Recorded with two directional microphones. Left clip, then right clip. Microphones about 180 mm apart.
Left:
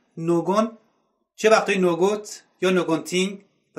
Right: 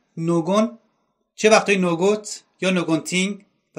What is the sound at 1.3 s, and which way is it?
Speech, 30° right (ahead or behind).